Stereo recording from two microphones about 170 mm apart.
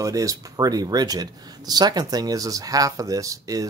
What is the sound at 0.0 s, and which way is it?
Speech, 20° right (ahead or behind).